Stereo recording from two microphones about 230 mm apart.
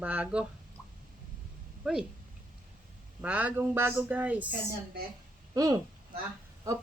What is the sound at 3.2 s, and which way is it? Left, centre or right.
Speech, centre.